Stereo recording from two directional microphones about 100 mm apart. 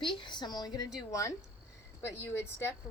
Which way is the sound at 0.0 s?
55° left (ahead or behind).